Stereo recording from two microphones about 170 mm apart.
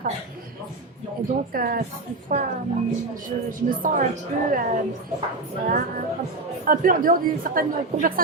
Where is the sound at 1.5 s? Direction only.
60° right (ahead or behind).